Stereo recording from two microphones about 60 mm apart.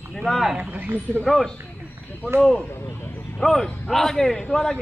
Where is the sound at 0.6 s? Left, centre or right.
Right.